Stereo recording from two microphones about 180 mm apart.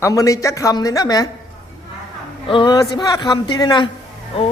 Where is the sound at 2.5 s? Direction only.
25° left (ahead or behind).